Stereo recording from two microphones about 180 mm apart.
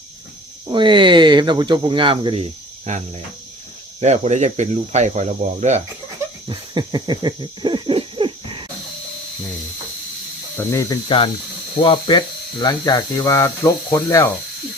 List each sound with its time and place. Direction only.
0.7 s speech: 25° right (ahead or behind)
4.0 s speech: 40° right (ahead or behind)
6.5 s owl: 25° right (ahead or behind)
10.6 s speech: 15° left (ahead or behind)
11.8 s speech: 25° left (ahead or behind)